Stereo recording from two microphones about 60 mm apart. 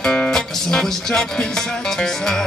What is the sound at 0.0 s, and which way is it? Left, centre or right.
Music, centre.